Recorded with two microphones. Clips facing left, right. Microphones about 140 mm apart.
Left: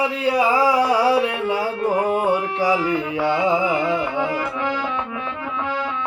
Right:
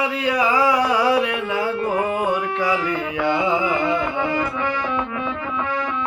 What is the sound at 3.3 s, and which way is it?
Carnatic music, 10° left (ahead or behind).